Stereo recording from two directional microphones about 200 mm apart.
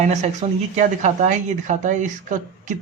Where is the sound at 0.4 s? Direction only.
35° right (ahead or behind).